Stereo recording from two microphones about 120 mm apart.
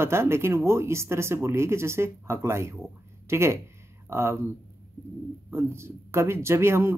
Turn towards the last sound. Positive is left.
turn(degrees=-20)  # may be behind; listen again after turning